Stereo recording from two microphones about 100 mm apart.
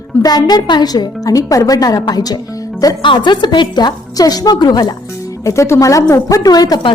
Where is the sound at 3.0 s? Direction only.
50° left (ahead or behind).